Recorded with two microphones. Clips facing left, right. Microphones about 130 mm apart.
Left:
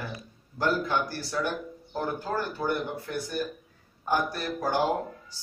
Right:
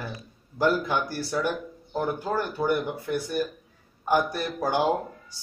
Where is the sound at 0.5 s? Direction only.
10° right (ahead or behind).